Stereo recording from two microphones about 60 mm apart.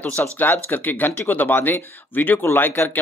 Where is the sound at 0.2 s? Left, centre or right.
Left.